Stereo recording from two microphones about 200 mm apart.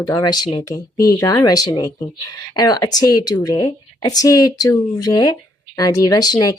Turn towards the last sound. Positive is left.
turn(degrees=20)  # may be behind; listen again after turning